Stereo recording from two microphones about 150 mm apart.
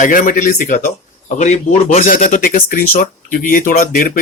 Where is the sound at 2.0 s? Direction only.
65° left (ahead or behind).